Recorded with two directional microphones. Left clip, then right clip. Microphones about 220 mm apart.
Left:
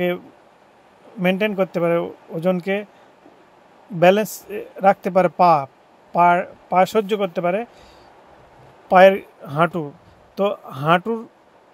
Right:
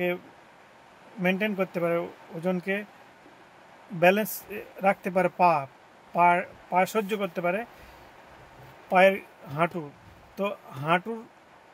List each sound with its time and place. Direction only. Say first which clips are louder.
1.2 s speech: left 7 dB; 35° left (ahead or behind)
4.0 s speech: left 7 dB; 30° left (ahead or behind)
8.8 s speech: left 9 dB; 30° left (ahead or behind)